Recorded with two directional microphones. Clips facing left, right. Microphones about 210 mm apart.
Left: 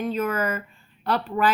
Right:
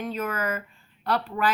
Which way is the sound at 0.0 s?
30° left (ahead or behind).